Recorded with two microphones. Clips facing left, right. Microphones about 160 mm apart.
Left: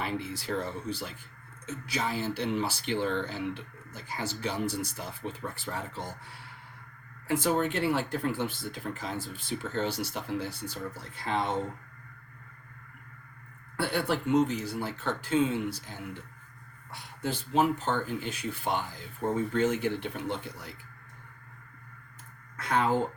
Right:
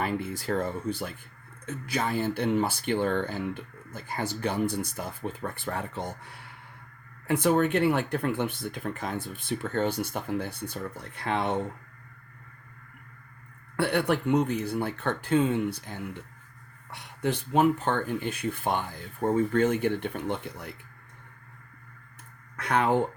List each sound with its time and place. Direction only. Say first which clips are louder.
0.0 s speech: right 4 dB; 50° right (ahead or behind)
7.3 s speech: right 4 dB; 60° right (ahead or behind)
13.7 s speech: right 4 dB; 65° right (ahead or behind)
22.5 s speech: right 2 dB; 65° right (ahead or behind)